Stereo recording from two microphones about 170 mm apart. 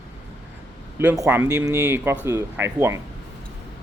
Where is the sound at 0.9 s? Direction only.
15° right (ahead or behind).